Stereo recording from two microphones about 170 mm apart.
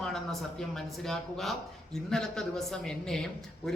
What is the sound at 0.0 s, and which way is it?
A man's voice, centre (ahead or behind).